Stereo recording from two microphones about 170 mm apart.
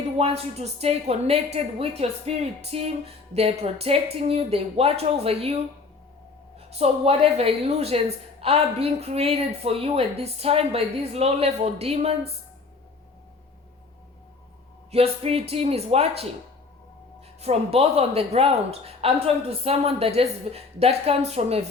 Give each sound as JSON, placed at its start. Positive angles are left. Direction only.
{"t": 0.2, "sound": "a woman's voice", "side_deg": -40}
{"t": 14.8, "sound": "a woman's voice", "side_deg": -35}
{"t": 17.4, "sound": "a woman's voice", "side_deg": -35}